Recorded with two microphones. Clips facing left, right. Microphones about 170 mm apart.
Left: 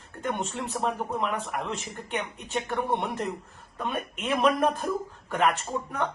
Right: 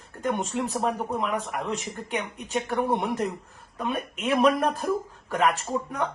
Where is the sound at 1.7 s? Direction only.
10° right (ahead or behind).